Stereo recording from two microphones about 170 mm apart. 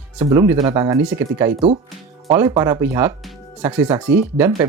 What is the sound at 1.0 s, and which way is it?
Speech, 10° right (ahead or behind).